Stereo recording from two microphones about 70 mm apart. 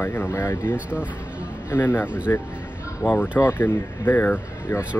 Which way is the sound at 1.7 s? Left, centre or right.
Left.